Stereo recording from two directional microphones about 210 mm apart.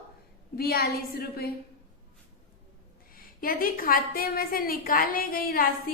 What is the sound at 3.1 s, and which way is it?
A woman's voice, 45° left (ahead or behind).